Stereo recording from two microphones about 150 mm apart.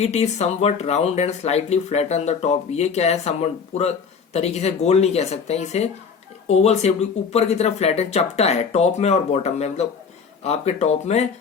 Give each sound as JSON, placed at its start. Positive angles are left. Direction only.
{"t": 0.0, "sound": "speech", "side_deg": 45}